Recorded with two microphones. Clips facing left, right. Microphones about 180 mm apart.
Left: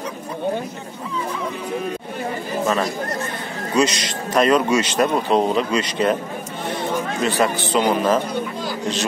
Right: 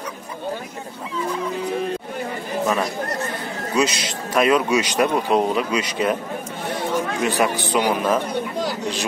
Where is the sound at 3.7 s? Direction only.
5° right (ahead or behind).